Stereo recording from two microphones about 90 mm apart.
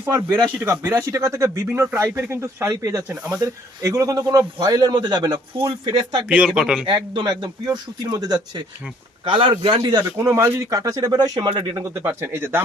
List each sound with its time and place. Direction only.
0.6 s a man's voice: 35° right (ahead or behind); by 5.4 s 55° right (ahead or behind)
5.5 s speech: 70° right (ahead or behind)
6.2 s speech: 10° right (ahead or behind)
6.8 s speech: 70° right (ahead or behind); by 8.6 s 50° right (ahead or behind)
9.3 s speech: 85° right
9.8 s speech: 40° right (ahead or behind); by 11.8 s 60° right (ahead or behind)
12.0 s speech: 25° right (ahead or behind)